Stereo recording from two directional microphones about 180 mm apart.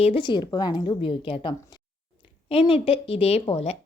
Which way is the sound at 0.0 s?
30° left (ahead or behind).